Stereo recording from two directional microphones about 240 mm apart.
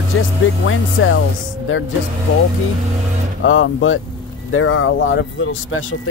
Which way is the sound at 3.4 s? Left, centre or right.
Left.